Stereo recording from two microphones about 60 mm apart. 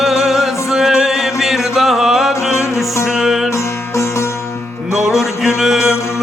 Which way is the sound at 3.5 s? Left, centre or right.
Left.